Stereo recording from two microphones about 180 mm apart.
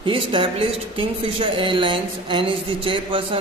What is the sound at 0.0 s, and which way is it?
Speech, 30° right (ahead or behind).